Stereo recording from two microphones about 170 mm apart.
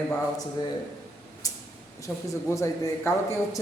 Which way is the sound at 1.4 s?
20° left (ahead or behind).